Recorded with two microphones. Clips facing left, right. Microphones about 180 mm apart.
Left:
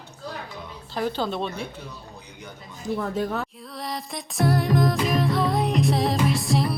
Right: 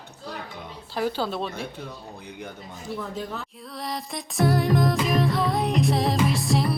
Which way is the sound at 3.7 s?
Centre (ahead or behind).